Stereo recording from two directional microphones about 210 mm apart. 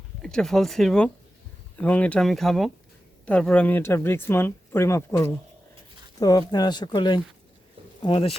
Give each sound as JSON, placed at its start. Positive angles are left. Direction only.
{"t": 0.2, "sound": "speech", "side_deg": 5}